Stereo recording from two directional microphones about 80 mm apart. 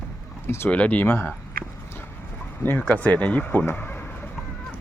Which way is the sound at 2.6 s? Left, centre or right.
Left.